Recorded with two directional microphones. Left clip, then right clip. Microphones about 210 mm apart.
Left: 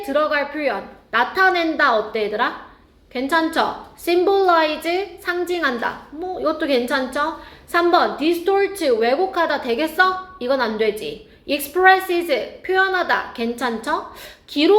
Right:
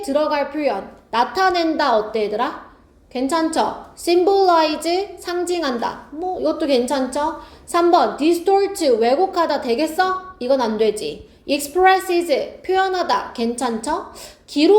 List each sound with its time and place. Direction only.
0.0 s a woman's voice: 20° right (ahead or behind)